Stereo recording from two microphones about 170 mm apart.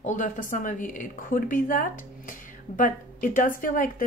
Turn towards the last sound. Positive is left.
turn(degrees=55)  # may be behind; listen again after turning